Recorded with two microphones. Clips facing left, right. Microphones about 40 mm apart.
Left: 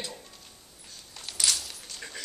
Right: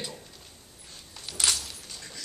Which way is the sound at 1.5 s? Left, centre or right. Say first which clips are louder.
Right 1 dB; right.